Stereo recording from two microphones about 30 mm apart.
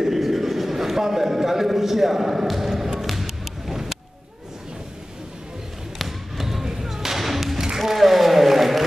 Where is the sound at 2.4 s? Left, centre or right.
Centre.